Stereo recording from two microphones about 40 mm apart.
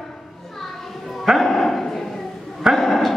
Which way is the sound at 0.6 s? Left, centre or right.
Centre.